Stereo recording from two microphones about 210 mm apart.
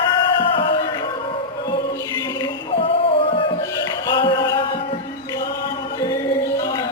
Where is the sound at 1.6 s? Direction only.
20° left (ahead or behind).